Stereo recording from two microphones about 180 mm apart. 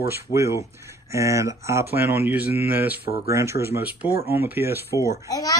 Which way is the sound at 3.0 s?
55° left (ahead or behind).